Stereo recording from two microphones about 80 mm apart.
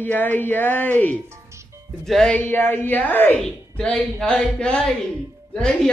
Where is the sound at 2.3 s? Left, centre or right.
Left.